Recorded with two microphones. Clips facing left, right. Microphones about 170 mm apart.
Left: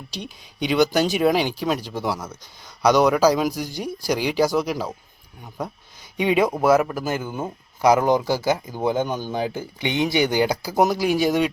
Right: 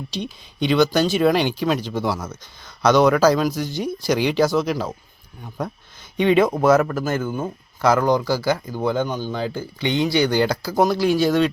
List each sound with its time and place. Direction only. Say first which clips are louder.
0.6 s speech: right 2 dB; 10° left (ahead or behind)
1.3 s speech: right 2 dB; centre (ahead or behind)
3.3 s speech: right 2 dB; 15° left (ahead or behind)